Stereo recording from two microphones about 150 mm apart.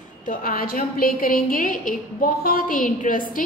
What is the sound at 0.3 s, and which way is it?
A woman's voice, 70° left (ahead or behind).